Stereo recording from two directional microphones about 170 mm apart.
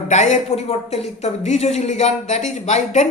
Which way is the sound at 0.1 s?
45° left (ahead or behind).